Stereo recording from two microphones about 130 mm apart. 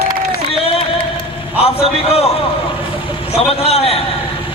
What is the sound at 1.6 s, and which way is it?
Speech, 50° left (ahead or behind).